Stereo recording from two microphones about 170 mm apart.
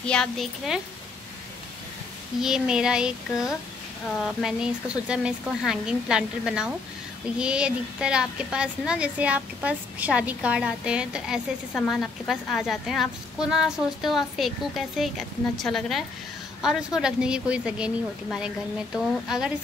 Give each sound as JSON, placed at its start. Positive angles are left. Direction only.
{"t": 0.0, "sound": "a woman's voice", "side_deg": 5}
{"t": 2.4, "sound": "a woman's voice", "side_deg": -5}